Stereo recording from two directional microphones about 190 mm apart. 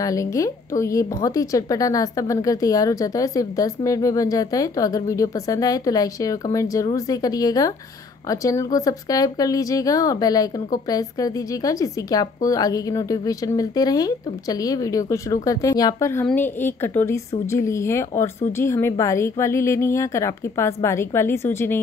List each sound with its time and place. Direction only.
0.0 s a woman's voice: 15° left (ahead or behind)